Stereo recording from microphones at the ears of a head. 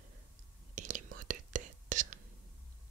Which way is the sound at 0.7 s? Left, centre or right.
Right.